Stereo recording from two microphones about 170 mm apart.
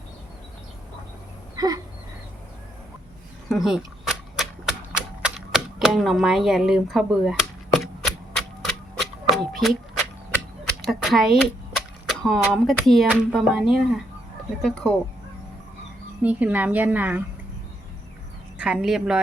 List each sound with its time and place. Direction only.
1.5 s a sound: 20° right (ahead or behind)
3.5 s cap gun: centre (ahead or behind)
10.8 s speech: centre (ahead or behind)
16.2 s a woman's voice: 10° right (ahead or behind)
18.6 s speech: 5° right (ahead or behind)